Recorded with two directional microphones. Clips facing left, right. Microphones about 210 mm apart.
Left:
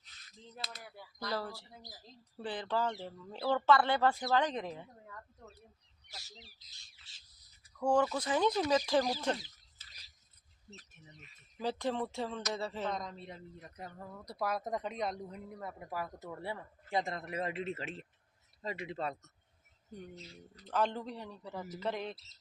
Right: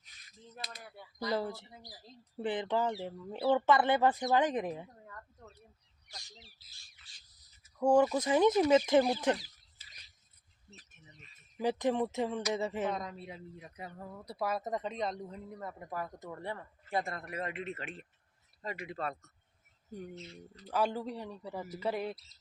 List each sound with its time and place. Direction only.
0.0 s mechanisms: 15° right (ahead or behind)
0.6 s a sound: 15° right (ahead or behind)
1.2 s speech: 20° right (ahead or behind)
6.1 s speech: 5° left (ahead or behind)
6.7 s squawk: 25° left (ahead or behind)
7.6 s speech: 20° right (ahead or behind)
11.5 s a man's voice: 15° right (ahead or behind); by 19.1 s 25° left (ahead or behind)
20.6 s speech: 10° right (ahead or behind)